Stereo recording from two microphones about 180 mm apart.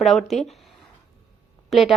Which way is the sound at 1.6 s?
Centre (ahead or behind).